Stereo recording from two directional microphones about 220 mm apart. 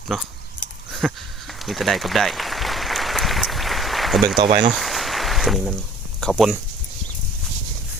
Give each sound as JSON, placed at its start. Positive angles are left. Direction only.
{"t": 0.1, "sound": "speech", "side_deg": 0}
{"t": 1.6, "sound": "applause", "side_deg": 0}
{"t": 4.4, "sound": "speech", "side_deg": -20}
{"t": 4.7, "sound": "a sound", "side_deg": 0}
{"t": 6.1, "sound": "speech", "side_deg": 0}